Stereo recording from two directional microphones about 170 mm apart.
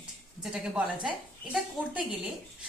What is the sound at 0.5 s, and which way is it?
A woman's voice, 5° right (ahead or behind).